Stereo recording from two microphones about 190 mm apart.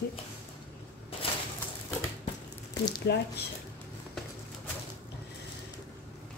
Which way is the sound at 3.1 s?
60° left (ahead or behind).